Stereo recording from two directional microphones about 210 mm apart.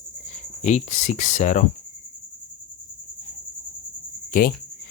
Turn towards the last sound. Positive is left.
turn(degrees=45)  # may be behind; listen again after turning